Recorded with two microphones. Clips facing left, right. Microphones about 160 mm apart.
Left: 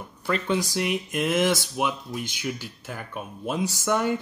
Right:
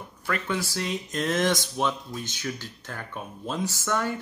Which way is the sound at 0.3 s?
20° left (ahead or behind).